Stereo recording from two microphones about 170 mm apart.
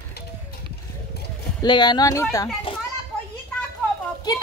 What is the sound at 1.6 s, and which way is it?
Speech, 25° left (ahead or behind).